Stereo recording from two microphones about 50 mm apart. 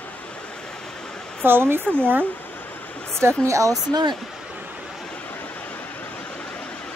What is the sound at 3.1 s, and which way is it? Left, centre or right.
Speech, right.